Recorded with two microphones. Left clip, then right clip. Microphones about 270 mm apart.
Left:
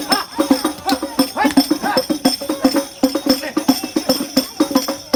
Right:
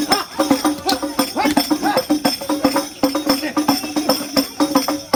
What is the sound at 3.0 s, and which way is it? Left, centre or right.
Music, centre.